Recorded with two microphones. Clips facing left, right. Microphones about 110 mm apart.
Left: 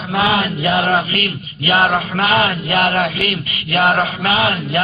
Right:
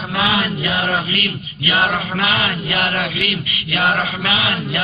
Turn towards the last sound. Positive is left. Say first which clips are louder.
# left 4 dB
turn(degrees=40)  # may be behind; listen again after turning